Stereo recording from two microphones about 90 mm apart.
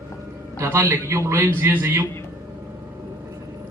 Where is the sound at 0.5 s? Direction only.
30° right (ahead or behind).